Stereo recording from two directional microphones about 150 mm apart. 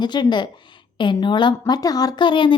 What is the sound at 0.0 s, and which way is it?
A woman's voice, 30° left (ahead or behind).